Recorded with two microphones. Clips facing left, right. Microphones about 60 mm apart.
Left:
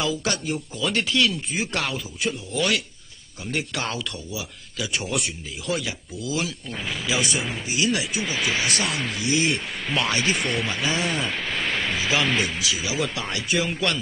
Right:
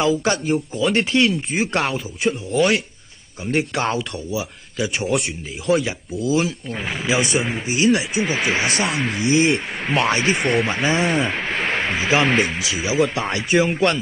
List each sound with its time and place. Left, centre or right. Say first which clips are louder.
0.0 s speech: right 7 dB; right
6.3 s speech: right 6 dB; right
7.2 s speech: right 5 dB; right